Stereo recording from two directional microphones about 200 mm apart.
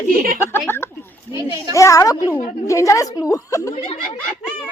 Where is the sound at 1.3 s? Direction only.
20° right (ahead or behind).